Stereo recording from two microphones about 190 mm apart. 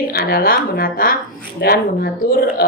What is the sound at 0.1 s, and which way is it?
A woman's voice, 50° left (ahead or behind).